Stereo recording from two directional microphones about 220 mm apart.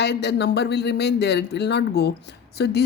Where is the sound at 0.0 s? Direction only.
50° left (ahead or behind).